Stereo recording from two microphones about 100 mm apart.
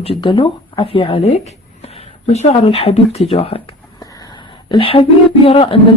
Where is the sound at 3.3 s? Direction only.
70° left (ahead or behind).